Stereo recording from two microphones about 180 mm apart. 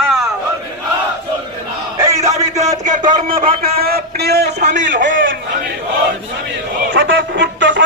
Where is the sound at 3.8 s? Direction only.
60° right (ahead or behind); by 5.1 s 80° right.